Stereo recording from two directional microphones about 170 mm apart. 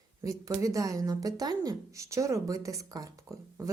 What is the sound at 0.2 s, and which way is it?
A woman's voice, 20° right (ahead or behind).